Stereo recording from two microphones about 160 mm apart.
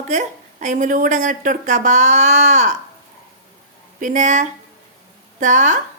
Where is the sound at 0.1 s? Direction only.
50° right (ahead or behind).